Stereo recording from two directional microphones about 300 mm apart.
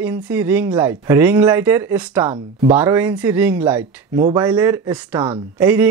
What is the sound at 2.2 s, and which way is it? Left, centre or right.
Speech, centre.